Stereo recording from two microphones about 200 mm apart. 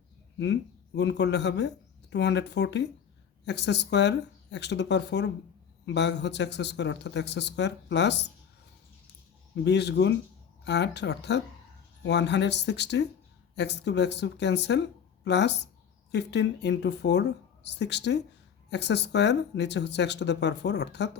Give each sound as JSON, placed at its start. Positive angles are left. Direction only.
{"t": 0.3, "sound": "speech", "side_deg": 60}
{"t": 9.6, "sound": "speech", "side_deg": 60}